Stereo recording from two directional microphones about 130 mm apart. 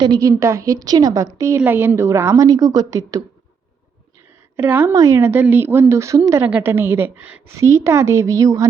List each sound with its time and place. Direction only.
0.0 s a woman's voice: 35° right (ahead or behind)
0.3 s a woman's voice: 20° right (ahead or behind)
4.5 s a woman's voice: 15° right (ahead or behind)